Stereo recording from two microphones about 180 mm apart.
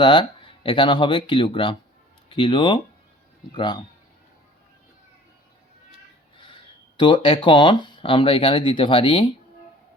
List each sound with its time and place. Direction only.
0.0 s speech: 25° left (ahead or behind)
6.5 s speech: 30° left (ahead or behind)